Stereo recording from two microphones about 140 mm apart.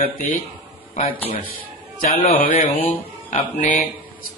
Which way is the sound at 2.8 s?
55° left (ahead or behind).